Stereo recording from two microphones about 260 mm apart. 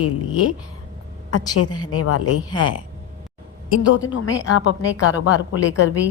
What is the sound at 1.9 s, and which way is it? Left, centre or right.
Speech, left.